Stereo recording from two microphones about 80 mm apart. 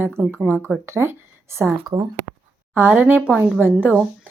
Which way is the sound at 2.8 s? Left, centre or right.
Right.